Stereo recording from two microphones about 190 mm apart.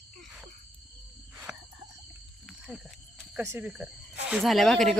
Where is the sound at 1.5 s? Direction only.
5° right (ahead or behind).